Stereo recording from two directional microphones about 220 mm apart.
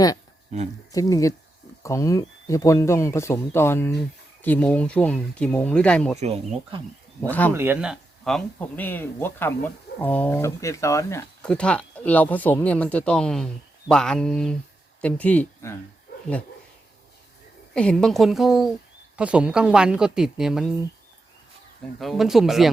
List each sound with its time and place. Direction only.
0.5 s speech: 30° right (ahead or behind)
0.9 s speech: 15° left (ahead or behind)
6.1 s speech: 30° right (ahead or behind)
7.2 s speech: 5° left (ahead or behind)
7.5 s speech: 10° right (ahead or behind); by 15.7 s 5° left (ahead or behind)
17.7 s speech: 5° left (ahead or behind)
21.9 s speech: centre (ahead or behind)